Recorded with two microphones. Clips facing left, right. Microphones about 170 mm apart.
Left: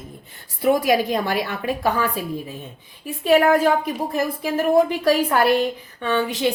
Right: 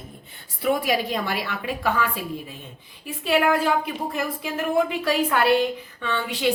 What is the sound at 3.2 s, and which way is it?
A woman's voice, 45° left (ahead or behind).